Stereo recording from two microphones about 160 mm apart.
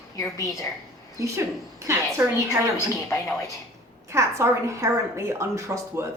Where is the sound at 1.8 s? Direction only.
20° right (ahead or behind).